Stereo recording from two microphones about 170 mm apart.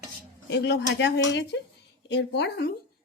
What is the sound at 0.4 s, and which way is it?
Speech, 90° left.